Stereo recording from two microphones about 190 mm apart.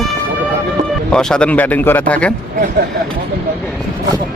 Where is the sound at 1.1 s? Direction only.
5° left (ahead or behind).